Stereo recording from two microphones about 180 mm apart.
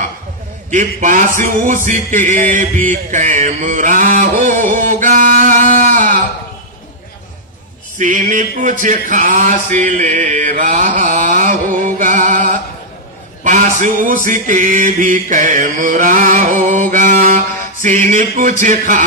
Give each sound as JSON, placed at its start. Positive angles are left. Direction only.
{"t": 0.7, "sound": "speech", "side_deg": -45}
{"t": 8.0, "sound": "speech", "side_deg": -45}
{"t": 16.9, "sound": "music", "side_deg": -45}